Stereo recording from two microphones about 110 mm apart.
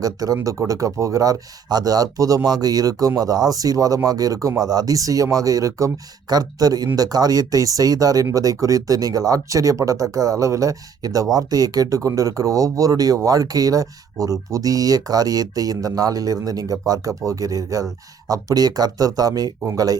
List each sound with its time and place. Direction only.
0.0 s speech: 35° right (ahead or behind)